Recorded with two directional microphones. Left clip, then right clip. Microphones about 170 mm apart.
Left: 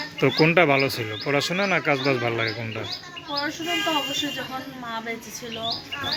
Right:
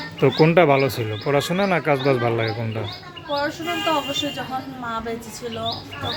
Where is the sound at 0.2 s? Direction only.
10° right (ahead or behind).